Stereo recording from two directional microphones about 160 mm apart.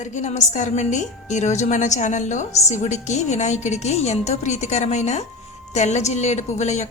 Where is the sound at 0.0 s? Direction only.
45° left (ahead or behind).